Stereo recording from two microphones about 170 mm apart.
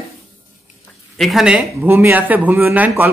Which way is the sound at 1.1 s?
Centre (ahead or behind).